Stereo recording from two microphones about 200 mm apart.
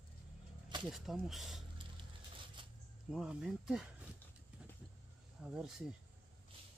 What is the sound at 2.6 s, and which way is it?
Zipper, 25° right (ahead or behind).